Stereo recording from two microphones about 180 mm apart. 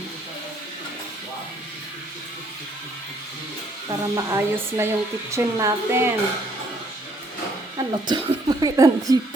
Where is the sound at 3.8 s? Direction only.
20° right (ahead or behind).